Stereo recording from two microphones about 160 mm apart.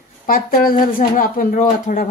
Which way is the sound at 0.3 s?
65° left (ahead or behind).